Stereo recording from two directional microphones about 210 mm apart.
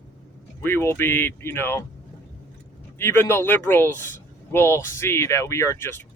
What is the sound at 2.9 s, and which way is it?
Speech, 10° left (ahead or behind).